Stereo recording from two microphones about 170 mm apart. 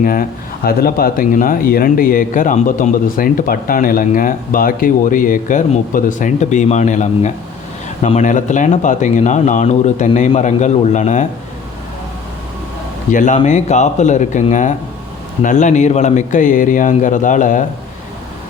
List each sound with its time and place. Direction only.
0.0 s a man's voice: 55° left (ahead or behind)
13.1 s a man's voice: 50° left (ahead or behind)